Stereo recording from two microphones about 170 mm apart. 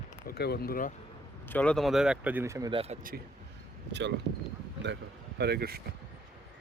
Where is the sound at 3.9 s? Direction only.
90° right.